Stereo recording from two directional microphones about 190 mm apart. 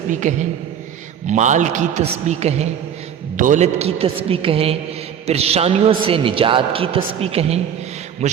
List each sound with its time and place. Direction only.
0.1 s a man's voice: 40° right (ahead or behind)